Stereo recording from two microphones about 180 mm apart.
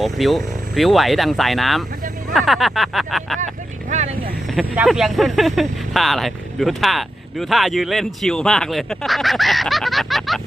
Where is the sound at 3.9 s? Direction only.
40° right (ahead or behind).